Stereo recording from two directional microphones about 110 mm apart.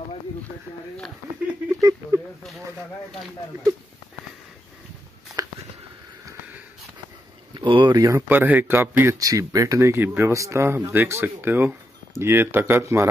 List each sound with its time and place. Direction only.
1.7 s speech: 30° right (ahead or behind)
5.4 s a sound: 30° right (ahead or behind)
7.5 s speech: 45° right (ahead or behind)
8.3 s speech: 15° right (ahead or behind)
9.0 s speech: 30° right (ahead or behind)